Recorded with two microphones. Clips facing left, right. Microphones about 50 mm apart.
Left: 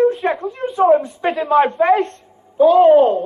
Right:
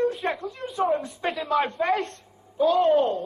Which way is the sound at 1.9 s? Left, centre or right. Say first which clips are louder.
Left 10 dB; left.